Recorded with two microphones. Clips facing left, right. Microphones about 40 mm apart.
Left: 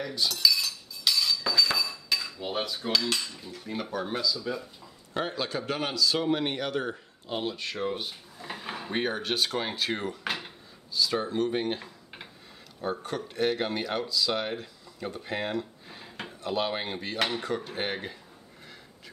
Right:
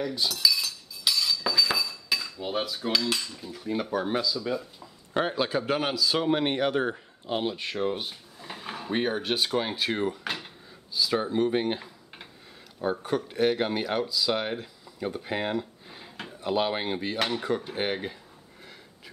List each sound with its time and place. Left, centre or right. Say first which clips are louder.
0.0 s cutlery: even; centre
3.9 s a man's voice: right 1 dB; centre
4.4 s speech: right 3 dB; centre
5.1 s a man's voice: right 4 dB; centre
8.4 s speech: left 1 dB; centre
10.9 s a man's voice: right 1 dB; centre